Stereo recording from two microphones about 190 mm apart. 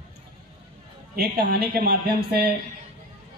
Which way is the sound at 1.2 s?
55° right (ahead or behind).